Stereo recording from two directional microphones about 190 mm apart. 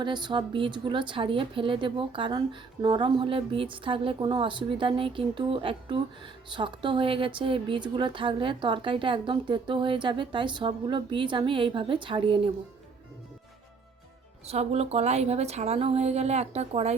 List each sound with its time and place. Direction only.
0.0 s a woman's voice: 25° right (ahead or behind)
14.4 s a woman's voice: 35° right (ahead or behind)